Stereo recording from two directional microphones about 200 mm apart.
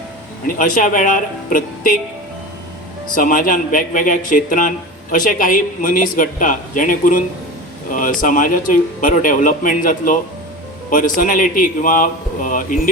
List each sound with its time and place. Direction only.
0.4 s speech: 40° left (ahead or behind)
3.2 s speech: 40° left (ahead or behind)